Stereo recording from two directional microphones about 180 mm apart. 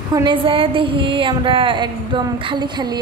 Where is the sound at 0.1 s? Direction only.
25° right (ahead or behind).